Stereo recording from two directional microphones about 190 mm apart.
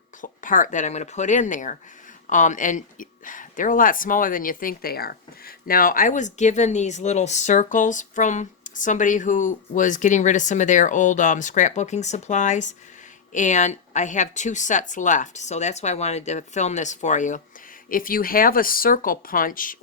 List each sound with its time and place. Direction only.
0.2 s speech: 45° left (ahead or behind)